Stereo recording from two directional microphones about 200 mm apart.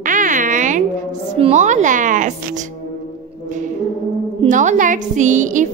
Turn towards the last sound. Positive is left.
turn(degrees=-40)  # may be behind; listen again after turning